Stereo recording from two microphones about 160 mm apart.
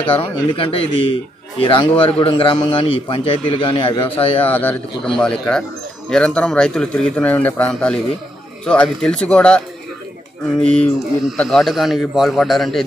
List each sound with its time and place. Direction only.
0.1 s a man's voice: 35° left (ahead or behind)
4.5 s a man's voice: 10° left (ahead or behind)
10.6 s mantra: 5° left (ahead or behind)
11.3 s a man's voice: centre (ahead or behind)